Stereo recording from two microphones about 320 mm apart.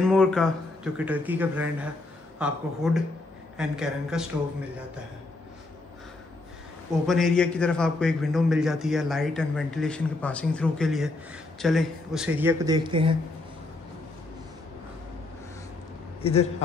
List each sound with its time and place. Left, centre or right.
0.0 s a man's voice: centre
7.1 s a man's voice: centre
16.2 s a man's voice: centre